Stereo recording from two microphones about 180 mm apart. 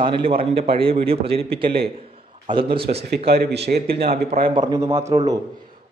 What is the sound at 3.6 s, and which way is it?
Speech, 60° right (ahead or behind).